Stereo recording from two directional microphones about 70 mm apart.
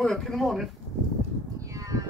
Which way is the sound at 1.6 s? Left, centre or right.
Right.